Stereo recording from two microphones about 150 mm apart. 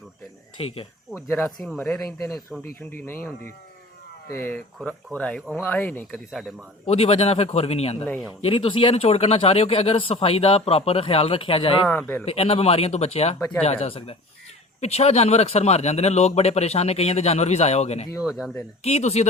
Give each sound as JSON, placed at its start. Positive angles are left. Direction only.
{"t": 0.5, "sound": "speech", "side_deg": 35}
{"t": 1.1, "sound": "speech", "side_deg": -5}
{"t": 1.6, "sound": "speech", "side_deg": 5}
{"t": 6.8, "sound": "speech", "side_deg": 40}
{"t": 11.9, "sound": "speech", "side_deg": 10}
{"t": 12.2, "sound": "speech", "side_deg": 40}
{"t": 18.2, "sound": "speech", "side_deg": -5}
{"t": 18.8, "sound": "speech", "side_deg": 45}